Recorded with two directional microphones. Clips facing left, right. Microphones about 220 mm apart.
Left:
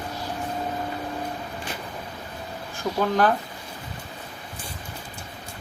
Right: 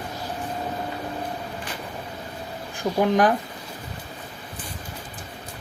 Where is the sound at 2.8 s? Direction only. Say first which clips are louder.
Right 2 dB; 15° right (ahead or behind).